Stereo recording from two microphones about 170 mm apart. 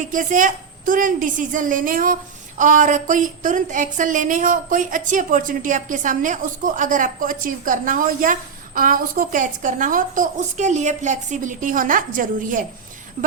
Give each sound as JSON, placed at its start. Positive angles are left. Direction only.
{"t": 0.1, "sound": "a woman's voice", "side_deg": -50}